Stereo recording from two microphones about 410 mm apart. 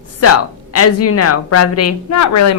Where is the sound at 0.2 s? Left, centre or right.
Left.